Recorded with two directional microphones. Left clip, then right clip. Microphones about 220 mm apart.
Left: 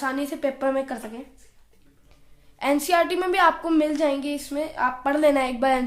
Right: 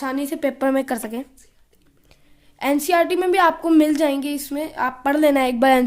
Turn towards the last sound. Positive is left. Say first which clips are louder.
# right 6 dB
turn(degrees=-40)  # may be behind; listen again after turning